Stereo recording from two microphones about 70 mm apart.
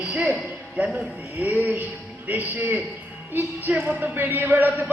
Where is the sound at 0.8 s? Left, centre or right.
Right.